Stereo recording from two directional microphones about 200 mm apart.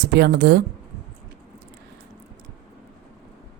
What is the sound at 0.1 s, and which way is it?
Speech, 55° right (ahead or behind).